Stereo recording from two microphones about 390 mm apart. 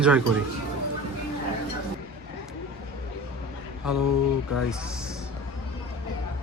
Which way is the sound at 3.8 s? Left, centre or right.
Left.